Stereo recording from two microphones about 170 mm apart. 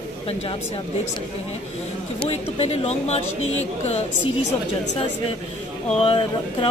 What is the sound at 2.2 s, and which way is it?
A woman's voice, 35° left (ahead or behind).